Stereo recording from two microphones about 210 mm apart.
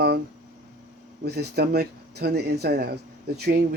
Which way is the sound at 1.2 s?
50° right (ahead or behind).